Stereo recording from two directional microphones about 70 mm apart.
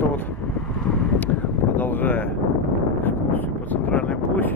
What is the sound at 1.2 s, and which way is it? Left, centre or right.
Wind, left.